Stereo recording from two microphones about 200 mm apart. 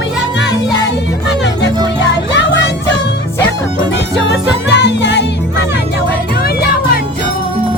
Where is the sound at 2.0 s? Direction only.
60° left (ahead or behind).